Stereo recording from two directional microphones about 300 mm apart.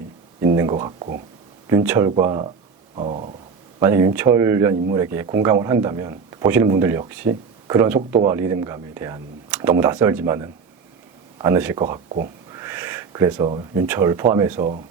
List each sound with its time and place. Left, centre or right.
0.4 s speech: centre
1.6 s speech: centre
2.9 s a sound: centre
3.8 s speech: centre
12.0 s speech: right
12.5 s speech: centre